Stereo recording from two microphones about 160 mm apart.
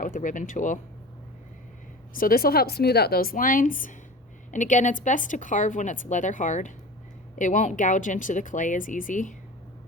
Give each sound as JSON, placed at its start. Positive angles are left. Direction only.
{"t": 0.0, "sound": "a woman's voice", "side_deg": 55}
{"t": 2.1, "sound": "a woman's voice", "side_deg": 65}